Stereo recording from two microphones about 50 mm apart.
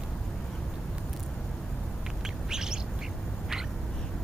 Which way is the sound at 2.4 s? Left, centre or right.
Centre.